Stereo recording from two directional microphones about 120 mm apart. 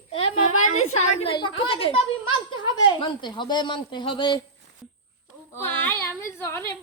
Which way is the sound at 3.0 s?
40° left (ahead or behind).